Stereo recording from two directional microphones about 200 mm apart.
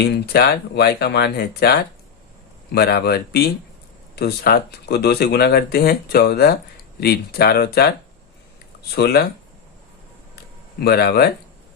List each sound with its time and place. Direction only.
0.0 s speech: 55° left (ahead or behind)
10.8 s speech: 50° left (ahead or behind)